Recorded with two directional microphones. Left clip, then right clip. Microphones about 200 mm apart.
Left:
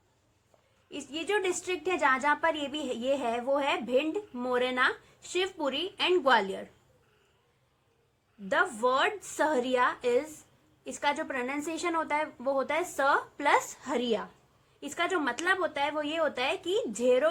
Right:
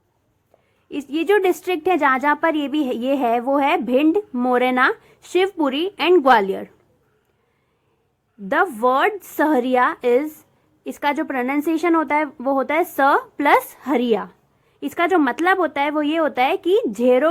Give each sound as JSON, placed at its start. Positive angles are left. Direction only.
{"t": 0.9, "sound": "a woman's voice", "side_deg": -40}
{"t": 8.4, "sound": "a woman's voice", "side_deg": -35}